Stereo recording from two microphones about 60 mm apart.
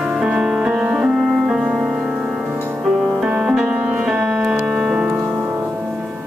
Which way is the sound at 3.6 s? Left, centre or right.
Centre.